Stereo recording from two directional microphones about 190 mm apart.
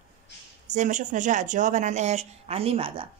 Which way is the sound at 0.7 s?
40° right (ahead or behind).